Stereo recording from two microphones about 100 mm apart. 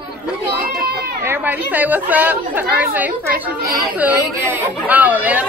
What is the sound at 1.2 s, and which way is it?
Speech, 20° right (ahead or behind).